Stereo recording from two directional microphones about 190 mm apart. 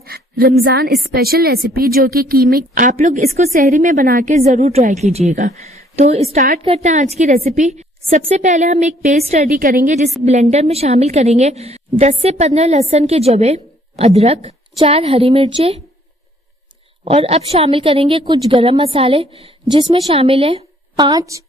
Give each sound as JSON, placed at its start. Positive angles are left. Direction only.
{"t": 0.0, "sound": "a woman's voice", "side_deg": -55}
{"t": 6.3, "sound": "a woman's voice", "side_deg": -55}
{"t": 6.6, "sound": "a woman's voice", "side_deg": -35}
{"t": 9.5, "sound": "a woman's voice", "side_deg": -50}
{"t": 17.0, "sound": "a woman's voice", "side_deg": -30}